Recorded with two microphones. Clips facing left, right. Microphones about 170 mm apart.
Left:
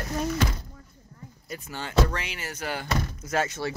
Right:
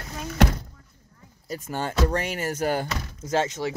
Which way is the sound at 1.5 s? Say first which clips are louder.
Left 1 dB; 45° right (ahead or behind).